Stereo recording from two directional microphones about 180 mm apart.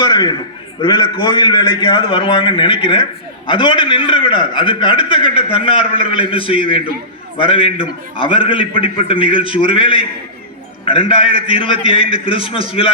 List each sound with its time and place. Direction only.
0.0 s a man's voice: 25° left (ahead or behind)